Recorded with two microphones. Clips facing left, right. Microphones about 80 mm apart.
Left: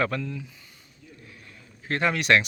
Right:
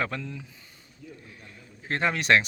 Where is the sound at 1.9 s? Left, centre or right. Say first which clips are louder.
Left 1 dB; right.